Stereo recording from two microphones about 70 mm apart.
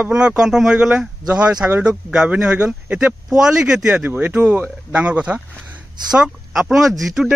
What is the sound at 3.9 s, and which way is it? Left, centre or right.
Speech, right.